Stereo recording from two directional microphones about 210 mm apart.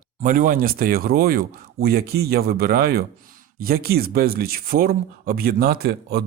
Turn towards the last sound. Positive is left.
turn(degrees=-50)  # may be behind; listen again after turning